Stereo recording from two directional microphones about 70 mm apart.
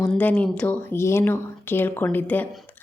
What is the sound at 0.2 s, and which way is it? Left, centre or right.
Speech, left.